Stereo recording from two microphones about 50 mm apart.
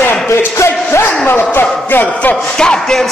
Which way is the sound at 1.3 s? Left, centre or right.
Left.